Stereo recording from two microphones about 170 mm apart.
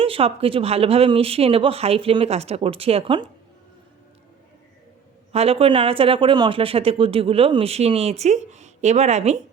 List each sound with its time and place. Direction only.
0.0 s speech: 35° right (ahead or behind)
5.3 s speech: 35° right (ahead or behind)